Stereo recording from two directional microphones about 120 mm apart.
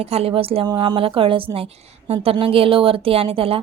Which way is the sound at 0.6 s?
40° right (ahead or behind).